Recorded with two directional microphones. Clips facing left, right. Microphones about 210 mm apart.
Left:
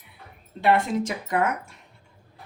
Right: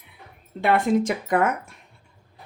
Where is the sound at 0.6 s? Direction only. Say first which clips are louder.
Right 2 dB; 55° right (ahead or behind).